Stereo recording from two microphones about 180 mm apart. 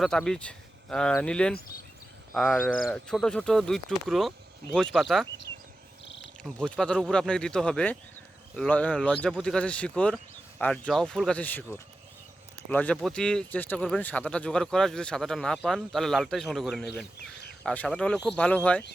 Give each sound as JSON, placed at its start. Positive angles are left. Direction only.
{"t": 0.0, "sound": "speech", "side_deg": 5}
{"t": 6.1, "sound": "insect", "side_deg": 80}
{"t": 6.4, "sound": "speech", "side_deg": 5}